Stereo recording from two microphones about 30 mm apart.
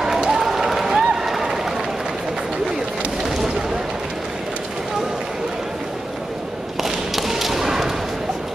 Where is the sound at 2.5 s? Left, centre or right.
Centre.